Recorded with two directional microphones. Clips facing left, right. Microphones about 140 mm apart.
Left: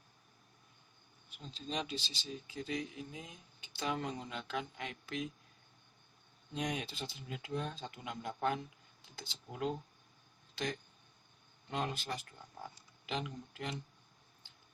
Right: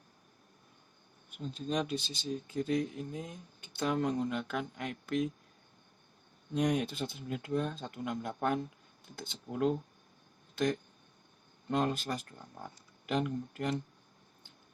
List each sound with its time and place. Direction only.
1.4 s speech: 55° right (ahead or behind)
6.5 s speech: 55° right (ahead or behind)
11.7 s speech: 50° right (ahead or behind)